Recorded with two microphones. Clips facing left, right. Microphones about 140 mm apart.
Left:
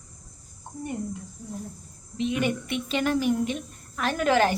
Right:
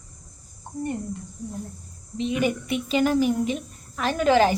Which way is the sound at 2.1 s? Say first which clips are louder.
Right 2 dB; centre (ahead or behind).